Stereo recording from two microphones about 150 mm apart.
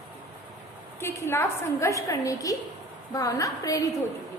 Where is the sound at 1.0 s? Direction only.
15° left (ahead or behind).